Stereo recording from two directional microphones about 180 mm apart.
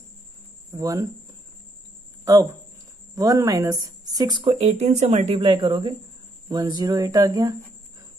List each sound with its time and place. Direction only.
0.7 s a woman's voice: 20° right (ahead or behind)
2.3 s a woman's voice: 20° right (ahead or behind)